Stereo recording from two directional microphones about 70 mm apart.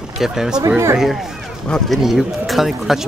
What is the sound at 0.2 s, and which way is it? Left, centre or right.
Speech, centre.